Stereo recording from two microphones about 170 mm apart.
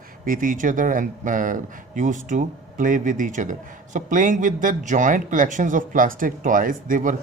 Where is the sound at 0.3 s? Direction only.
55° right (ahead or behind).